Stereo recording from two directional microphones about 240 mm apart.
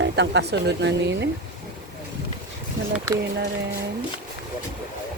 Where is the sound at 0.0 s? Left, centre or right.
Right.